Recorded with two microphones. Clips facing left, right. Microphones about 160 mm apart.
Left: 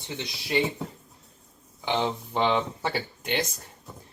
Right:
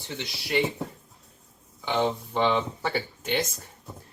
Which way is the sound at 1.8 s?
15° left (ahead or behind).